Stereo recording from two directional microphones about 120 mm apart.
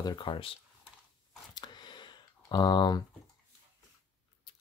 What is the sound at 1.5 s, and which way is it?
Typing, 35° left (ahead or behind).